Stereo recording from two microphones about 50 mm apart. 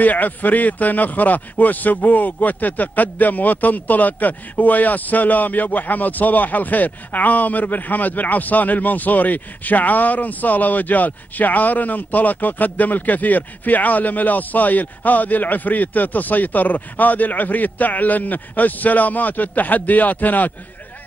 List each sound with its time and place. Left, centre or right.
0.0 s a man's voice: left